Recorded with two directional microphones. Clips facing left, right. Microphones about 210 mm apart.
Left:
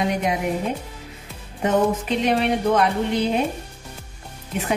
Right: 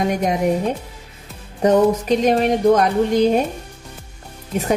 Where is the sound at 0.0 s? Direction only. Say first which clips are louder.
Right 3 dB; 45° right (ahead or behind).